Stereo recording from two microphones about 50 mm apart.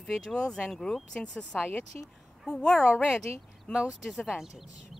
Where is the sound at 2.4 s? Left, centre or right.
Centre.